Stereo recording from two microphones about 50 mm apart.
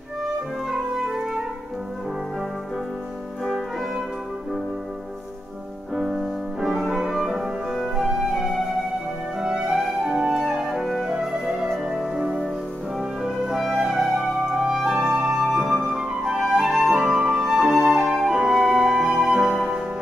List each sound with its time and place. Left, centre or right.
0.7 s music: centre
3.4 s music: centre
6.1 s music: centre
6.9 s flute: centre
9.4 s music: centre
15.5 s music: centre
15.9 s flute: centre